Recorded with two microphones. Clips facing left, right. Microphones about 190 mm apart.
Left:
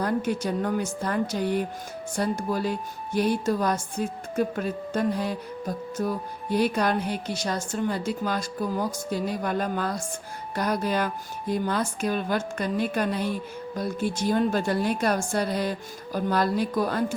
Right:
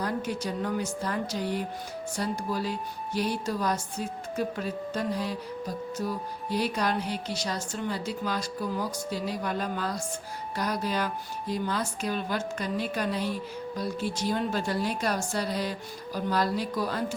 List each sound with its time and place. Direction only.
0.0 s speech: 50° left (ahead or behind)